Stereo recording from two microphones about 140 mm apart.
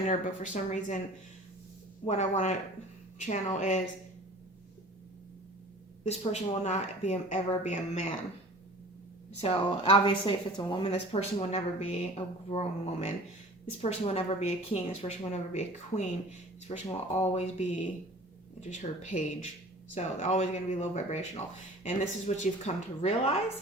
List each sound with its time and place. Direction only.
0.1 s speech: 60° left (ahead or behind)
2.0 s speech: 55° left (ahead or behind)
6.1 s speech: 50° left (ahead or behind)
9.4 s speech: 40° left (ahead or behind)
10.9 s speech: 50° left (ahead or behind)